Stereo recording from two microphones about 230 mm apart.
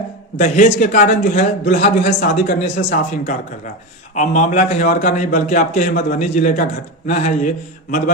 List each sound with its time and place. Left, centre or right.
0.3 s a man's voice: left
4.1 s a man's voice: left